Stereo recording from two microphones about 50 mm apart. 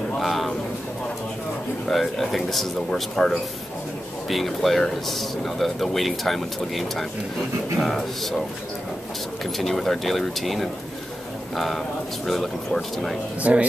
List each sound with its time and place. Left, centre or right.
0.2 s a sound: centre
1.9 s speech: centre
9.4 s speech: centre
13.4 s speech: right